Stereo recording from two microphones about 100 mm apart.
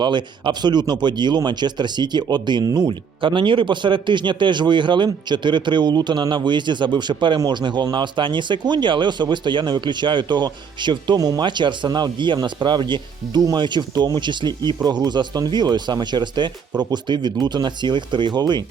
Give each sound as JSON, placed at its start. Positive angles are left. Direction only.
{"t": 0.0, "sound": "speech", "side_deg": -50}